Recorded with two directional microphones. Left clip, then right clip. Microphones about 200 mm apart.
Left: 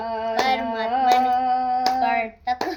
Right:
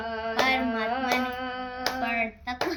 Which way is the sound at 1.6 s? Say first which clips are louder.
Left 11 dB; 40° left (ahead or behind).